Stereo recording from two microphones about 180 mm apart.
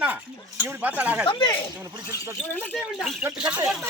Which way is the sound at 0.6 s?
10° right (ahead or behind).